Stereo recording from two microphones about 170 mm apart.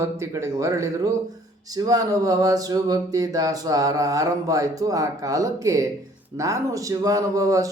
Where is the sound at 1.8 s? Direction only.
20° right (ahead or behind).